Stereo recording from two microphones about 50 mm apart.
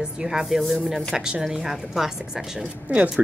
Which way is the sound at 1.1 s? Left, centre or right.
Centre.